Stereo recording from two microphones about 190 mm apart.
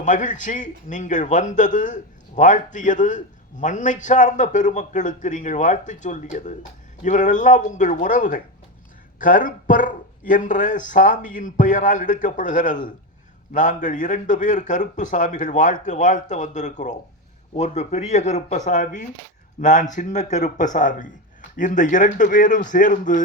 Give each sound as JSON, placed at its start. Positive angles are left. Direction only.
{"t": 0.0, "sound": "a man's voice", "side_deg": 40}